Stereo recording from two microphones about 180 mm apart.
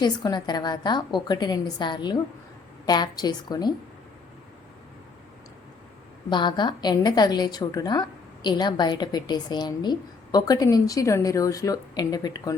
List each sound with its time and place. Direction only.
0.0 s a woman's voice: 25° left (ahead or behind)
6.3 s a woman's voice: 25° left (ahead or behind)